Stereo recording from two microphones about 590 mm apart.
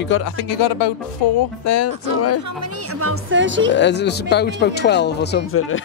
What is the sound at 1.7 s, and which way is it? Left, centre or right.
Speech, left.